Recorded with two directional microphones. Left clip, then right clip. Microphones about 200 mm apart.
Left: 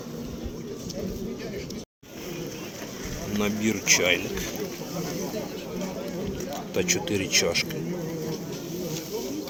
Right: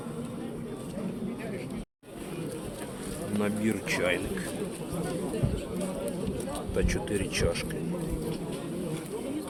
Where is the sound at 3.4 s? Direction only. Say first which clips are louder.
Left 3 dB; 15° left (ahead or behind).